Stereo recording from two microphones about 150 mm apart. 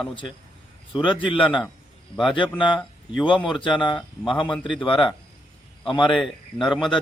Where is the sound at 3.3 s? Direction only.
35° left (ahead or behind).